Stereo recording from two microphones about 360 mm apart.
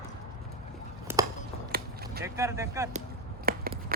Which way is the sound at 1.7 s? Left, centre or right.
Right.